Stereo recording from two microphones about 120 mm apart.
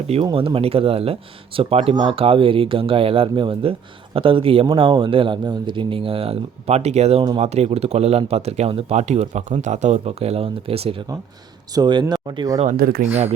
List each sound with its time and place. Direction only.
0.3 s speech: 50° right (ahead or behind)
11.7 s speech: 35° right (ahead or behind)
12.5 s speech: 75° right (ahead or behind)